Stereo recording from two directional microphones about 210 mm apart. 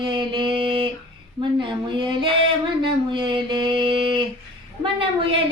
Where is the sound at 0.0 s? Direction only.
25° right (ahead or behind).